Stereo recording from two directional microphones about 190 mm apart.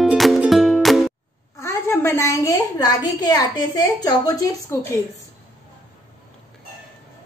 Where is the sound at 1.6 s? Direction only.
15° left (ahead or behind).